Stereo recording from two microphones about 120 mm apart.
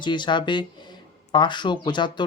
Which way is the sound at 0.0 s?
40° left (ahead or behind).